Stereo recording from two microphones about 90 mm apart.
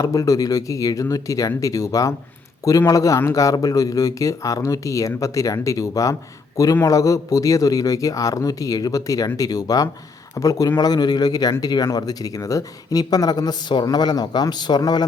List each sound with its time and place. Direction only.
0.0 s a man's voice: 40° left (ahead or behind)